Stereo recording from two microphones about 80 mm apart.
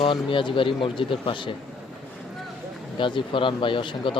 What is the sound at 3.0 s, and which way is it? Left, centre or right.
Speech, left.